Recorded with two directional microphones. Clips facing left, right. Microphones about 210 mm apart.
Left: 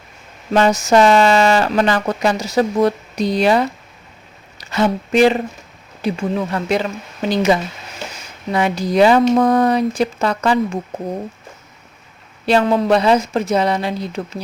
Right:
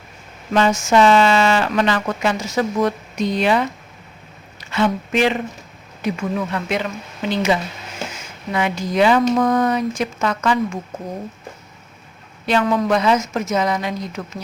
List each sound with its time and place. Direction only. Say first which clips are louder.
0.5 s speech: left 2 dB; 40° left (ahead or behind)
12.5 s speech: left 3 dB; 30° left (ahead or behind)